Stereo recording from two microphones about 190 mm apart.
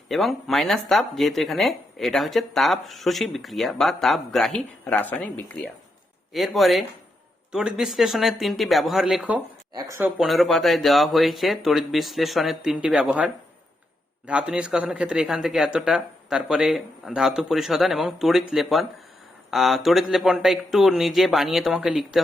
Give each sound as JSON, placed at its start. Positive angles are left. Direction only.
{"t": 0.1, "sound": "speech", "side_deg": 0}
{"t": 9.7, "sound": "speech", "side_deg": -15}
{"t": 10.2, "sound": "speech", "side_deg": 0}